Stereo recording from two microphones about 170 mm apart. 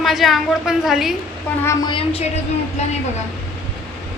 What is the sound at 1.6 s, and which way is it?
Speech, 25° left (ahead or behind).